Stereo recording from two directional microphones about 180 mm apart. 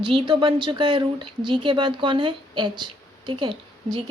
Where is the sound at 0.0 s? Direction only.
30° right (ahead or behind).